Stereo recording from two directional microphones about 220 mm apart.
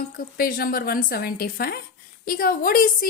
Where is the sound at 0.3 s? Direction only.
40° left (ahead or behind).